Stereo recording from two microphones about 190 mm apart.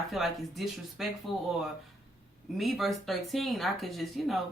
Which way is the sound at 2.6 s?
Centre (ahead or behind).